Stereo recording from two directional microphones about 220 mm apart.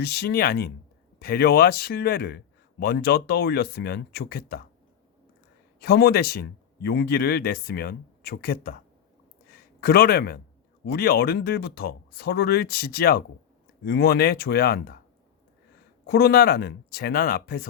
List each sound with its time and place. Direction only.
0.0 s a man's voice: 45° left (ahead or behind)
5.8 s a man's voice: 45° left (ahead or behind)
9.8 s a man's voice: 45° left (ahead or behind)
16.0 s a man's voice: 45° left (ahead or behind)